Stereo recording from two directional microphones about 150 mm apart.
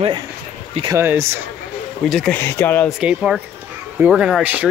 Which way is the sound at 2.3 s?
15° left (ahead or behind).